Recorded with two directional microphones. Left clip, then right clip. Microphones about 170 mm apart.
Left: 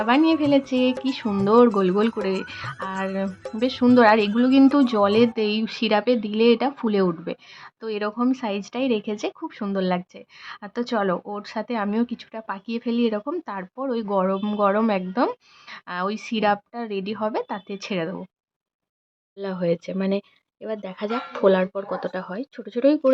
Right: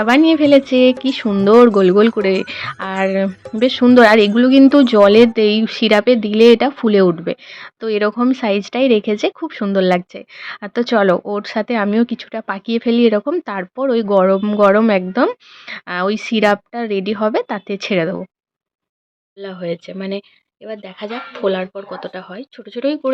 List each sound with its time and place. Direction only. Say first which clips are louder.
0.0 s a woman's voice: right 7 dB; 20° right (ahead or behind)
19.4 s speech: even; 10° left (ahead or behind)